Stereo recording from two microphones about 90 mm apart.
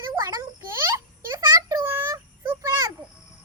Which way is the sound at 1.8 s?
30° right (ahead or behind).